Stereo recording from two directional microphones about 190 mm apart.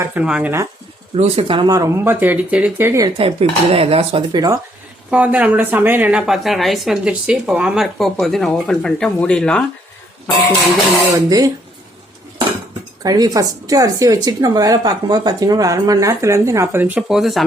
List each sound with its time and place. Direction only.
0.0 s a woman's voice: 10° right (ahead or behind)
1.1 s a woman's voice: 30° right (ahead or behind); by 3.1 s 15° right (ahead or behind)
3.2 s speech: 30° right (ahead or behind)
5.1 s speech: 5° right (ahead or behind)
11.3 s speech: 20° right (ahead or behind)
13.0 s a woman's voice: 20° right (ahead or behind); by 17.4 s centre (ahead or behind)